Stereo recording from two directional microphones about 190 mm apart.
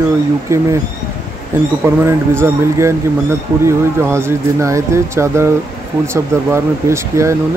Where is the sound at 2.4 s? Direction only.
15° right (ahead or behind).